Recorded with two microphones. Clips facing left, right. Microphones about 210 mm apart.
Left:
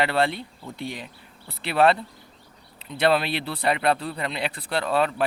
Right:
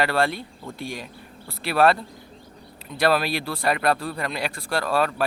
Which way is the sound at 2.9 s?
25° left (ahead or behind).